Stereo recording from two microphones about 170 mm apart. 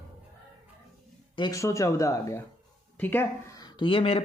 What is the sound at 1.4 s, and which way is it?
Speech, 20° left (ahead or behind).